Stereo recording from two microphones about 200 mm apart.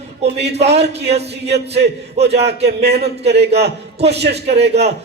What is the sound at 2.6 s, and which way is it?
A man's voice, 55° right (ahead or behind).